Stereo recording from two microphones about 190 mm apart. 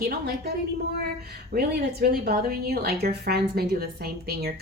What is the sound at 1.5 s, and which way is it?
A woman's voice, 55° right (ahead or behind).